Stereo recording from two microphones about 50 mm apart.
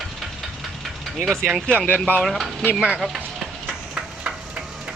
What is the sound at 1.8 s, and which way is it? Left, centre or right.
Speech, left.